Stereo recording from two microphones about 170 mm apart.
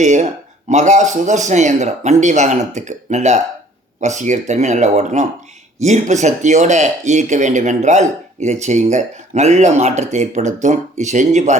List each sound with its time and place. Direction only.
0.0 s speech: 45° right (ahead or behind)